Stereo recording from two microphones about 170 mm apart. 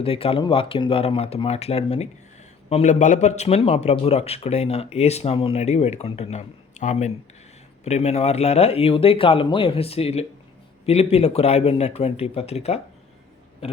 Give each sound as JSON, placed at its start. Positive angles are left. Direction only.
{"t": 0.0, "sound": "a man's voice", "side_deg": 35}